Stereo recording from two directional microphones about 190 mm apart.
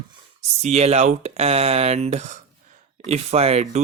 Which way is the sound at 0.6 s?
35° right (ahead or behind).